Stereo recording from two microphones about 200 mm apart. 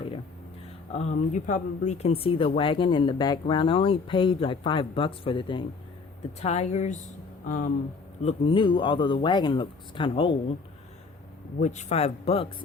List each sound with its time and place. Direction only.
0.9 s speech: 35° left (ahead or behind)
11.6 s speech: 35° left (ahead or behind)